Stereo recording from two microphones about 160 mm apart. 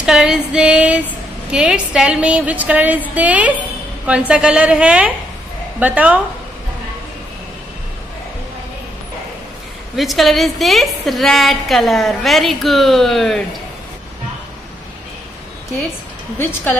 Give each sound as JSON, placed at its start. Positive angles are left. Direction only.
{"t": 0.0, "sound": "a woman's voice", "side_deg": -5}
{"t": 9.9, "sound": "a woman's voice", "side_deg": 0}